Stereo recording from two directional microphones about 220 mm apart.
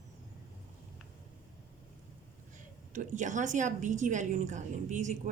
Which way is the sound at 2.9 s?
35° right (ahead or behind).